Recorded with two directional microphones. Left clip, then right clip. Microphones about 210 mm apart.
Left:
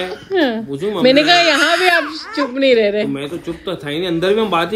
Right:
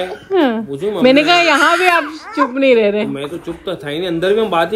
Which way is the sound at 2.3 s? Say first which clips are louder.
Right 2 dB; 20° right (ahead or behind).